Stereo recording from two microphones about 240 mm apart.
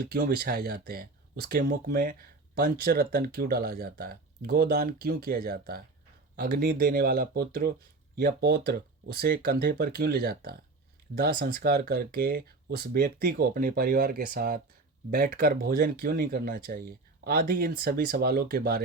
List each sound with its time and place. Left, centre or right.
0.0 s speech: right